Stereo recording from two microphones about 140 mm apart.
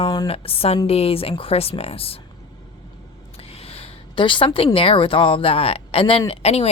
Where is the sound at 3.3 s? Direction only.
45° left (ahead or behind).